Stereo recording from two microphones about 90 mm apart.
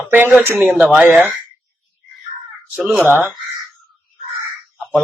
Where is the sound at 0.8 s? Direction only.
15° right (ahead or behind).